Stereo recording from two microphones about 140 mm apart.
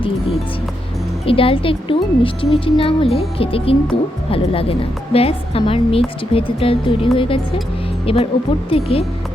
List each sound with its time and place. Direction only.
1.2 s a woman's voice: 40° left (ahead or behind)